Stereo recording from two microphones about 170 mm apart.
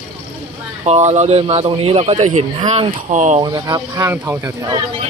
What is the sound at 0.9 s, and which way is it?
Speech, 40° right (ahead or behind).